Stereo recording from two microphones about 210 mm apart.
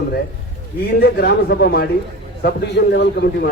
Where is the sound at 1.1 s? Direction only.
50° left (ahead or behind).